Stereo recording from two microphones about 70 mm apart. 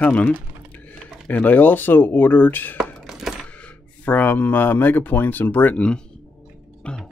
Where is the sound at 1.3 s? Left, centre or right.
Left.